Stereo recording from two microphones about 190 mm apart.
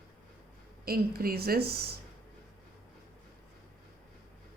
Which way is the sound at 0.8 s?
50° right (ahead or behind).